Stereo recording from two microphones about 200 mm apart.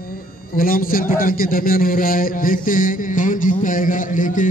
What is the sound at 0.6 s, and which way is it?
A man's voice, 45° left (ahead or behind).